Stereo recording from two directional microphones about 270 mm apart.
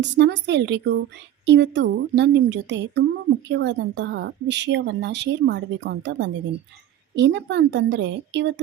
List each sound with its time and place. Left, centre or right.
0.0 s a woman's voice: right